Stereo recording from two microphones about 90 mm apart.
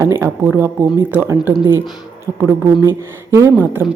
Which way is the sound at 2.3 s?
30° right (ahead or behind).